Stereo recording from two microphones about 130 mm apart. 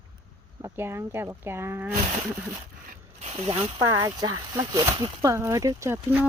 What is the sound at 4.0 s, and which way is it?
Speech, 25° right (ahead or behind).